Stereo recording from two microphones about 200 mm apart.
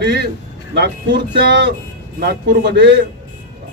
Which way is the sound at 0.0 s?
55° right (ahead or behind).